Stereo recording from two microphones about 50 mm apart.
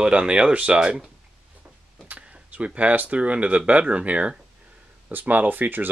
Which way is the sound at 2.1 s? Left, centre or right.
Right.